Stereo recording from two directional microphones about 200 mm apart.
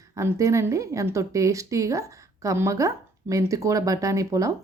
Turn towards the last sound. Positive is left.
turn(degrees=-15)  # may be behind; listen again after turning